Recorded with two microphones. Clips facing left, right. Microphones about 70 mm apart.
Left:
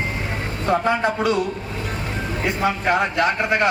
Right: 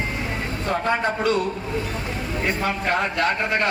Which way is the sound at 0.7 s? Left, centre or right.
Centre.